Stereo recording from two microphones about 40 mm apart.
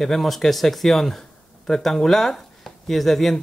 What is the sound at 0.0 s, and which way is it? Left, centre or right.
Speech, centre.